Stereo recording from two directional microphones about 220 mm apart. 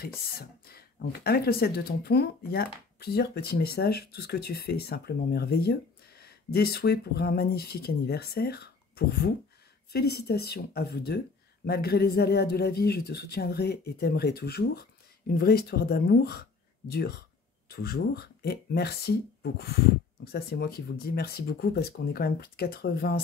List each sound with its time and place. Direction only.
0.0 s speech: 45° left (ahead or behind)